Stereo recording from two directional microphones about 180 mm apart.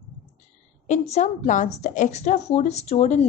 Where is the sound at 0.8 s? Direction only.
40° left (ahead or behind).